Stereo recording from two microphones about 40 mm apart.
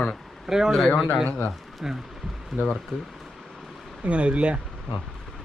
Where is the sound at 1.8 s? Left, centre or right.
Centre.